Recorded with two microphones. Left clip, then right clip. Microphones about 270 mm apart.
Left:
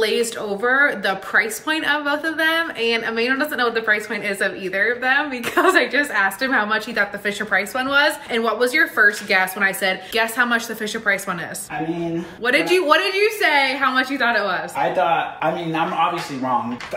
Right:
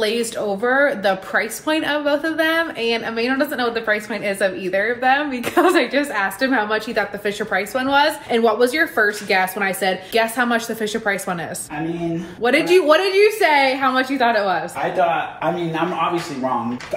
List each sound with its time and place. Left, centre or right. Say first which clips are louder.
0.0 s speech: even; centre
12.4 s speech: right 2 dB; centre